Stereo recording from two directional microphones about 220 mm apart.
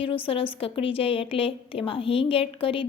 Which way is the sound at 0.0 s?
25° left (ahead or behind).